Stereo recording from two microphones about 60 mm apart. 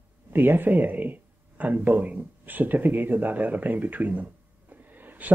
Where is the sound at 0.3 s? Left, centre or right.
Right.